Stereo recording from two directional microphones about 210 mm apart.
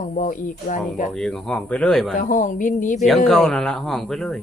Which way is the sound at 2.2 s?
40° left (ahead or behind).